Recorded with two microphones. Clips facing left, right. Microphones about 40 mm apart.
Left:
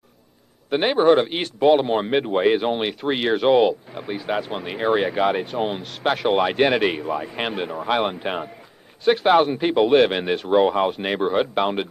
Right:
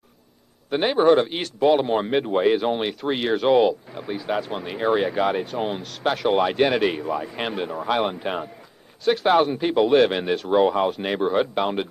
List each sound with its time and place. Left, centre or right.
0.7 s speech: left